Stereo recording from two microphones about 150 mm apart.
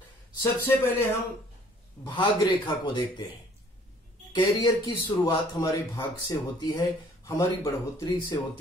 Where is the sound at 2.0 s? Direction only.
30° left (ahead or behind).